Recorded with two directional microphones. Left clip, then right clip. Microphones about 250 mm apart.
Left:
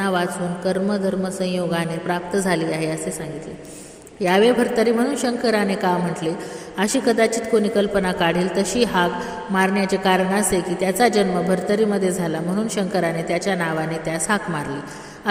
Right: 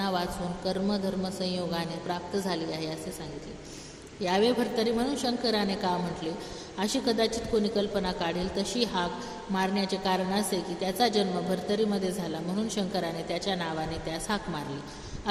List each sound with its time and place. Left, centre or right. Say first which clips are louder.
0.0 s a woman's voice: left 9 dB; left
4.2 s a woman's voice: left 10 dB; left
6.7 s a woman's voice: left 9 dB; left